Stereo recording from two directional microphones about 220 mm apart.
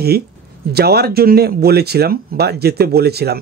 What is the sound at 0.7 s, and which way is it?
Speech, 45° right (ahead or behind).